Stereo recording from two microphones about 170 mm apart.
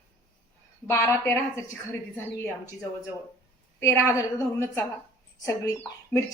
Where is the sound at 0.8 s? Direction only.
15° left (ahead or behind).